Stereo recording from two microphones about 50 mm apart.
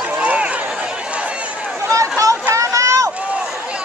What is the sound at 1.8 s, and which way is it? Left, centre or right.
Chatter, right.